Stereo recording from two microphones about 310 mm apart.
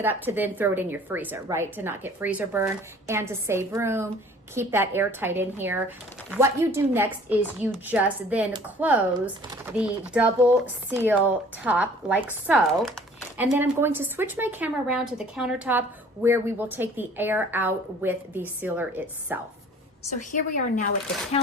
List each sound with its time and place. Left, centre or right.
0.0 s a woman's voice: centre
20.1 s a woman's voice: left